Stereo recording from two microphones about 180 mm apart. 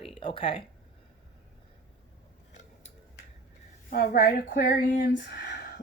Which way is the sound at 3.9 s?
55° left (ahead or behind).